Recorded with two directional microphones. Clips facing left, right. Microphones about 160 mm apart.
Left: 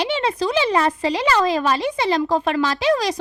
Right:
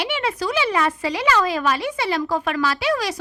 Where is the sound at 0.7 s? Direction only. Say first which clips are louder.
Left 3 dB; 35° left (ahead or behind).